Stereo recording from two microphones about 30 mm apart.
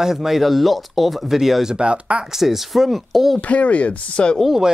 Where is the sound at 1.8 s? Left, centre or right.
Right.